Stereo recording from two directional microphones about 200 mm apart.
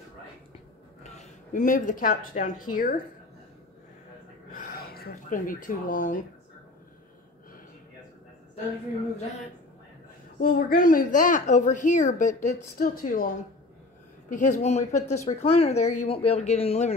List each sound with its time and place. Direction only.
1.0 s speech: 35° left (ahead or behind)
4.6 s speech: 50° left (ahead or behind)
10.4 s a child's voice: 45° left (ahead or behind)
14.3 s a child's voice: 40° left (ahead or behind)